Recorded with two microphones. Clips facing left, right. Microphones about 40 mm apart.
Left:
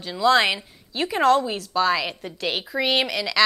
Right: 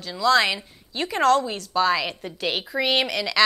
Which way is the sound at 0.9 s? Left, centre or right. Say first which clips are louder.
Left 1 dB; centre.